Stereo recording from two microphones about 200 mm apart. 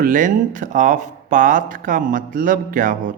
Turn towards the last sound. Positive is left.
turn(degrees=-45)  # may be behind; listen again after turning